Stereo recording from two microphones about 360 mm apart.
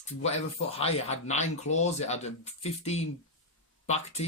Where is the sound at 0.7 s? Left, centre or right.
Centre.